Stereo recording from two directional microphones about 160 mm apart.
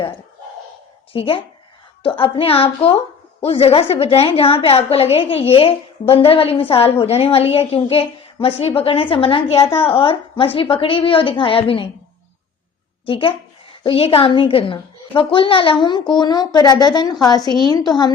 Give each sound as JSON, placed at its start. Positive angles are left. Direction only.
{"t": 1.1, "sound": "a woman's voice", "side_deg": 35}
{"t": 9.6, "sound": "speech", "side_deg": 15}
{"t": 9.8, "sound": "a woman's voice", "side_deg": 35}
{"t": 13.1, "sound": "a woman's voice", "side_deg": 35}